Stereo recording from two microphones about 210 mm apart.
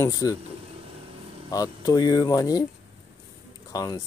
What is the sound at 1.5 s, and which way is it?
Speech, 15° left (ahead or behind).